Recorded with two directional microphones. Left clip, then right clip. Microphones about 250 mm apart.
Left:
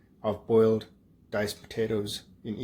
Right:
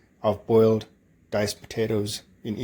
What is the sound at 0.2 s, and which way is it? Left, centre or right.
Speech, right.